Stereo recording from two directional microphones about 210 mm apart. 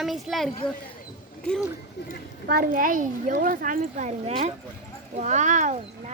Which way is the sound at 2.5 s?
45° right (ahead or behind).